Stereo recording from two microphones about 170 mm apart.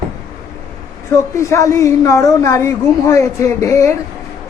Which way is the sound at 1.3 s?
20° left (ahead or behind).